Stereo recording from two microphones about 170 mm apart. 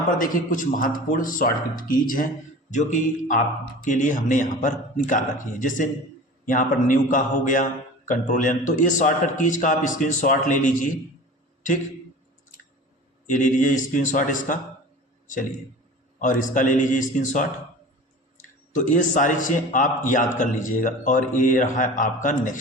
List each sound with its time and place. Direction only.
0.2 s a man's voice: 50° left (ahead or behind)
13.2 s a man's voice: 50° left (ahead or behind)
16.1 s a man's voice: 50° left (ahead or behind)
18.7 s a man's voice: 50° left (ahead or behind)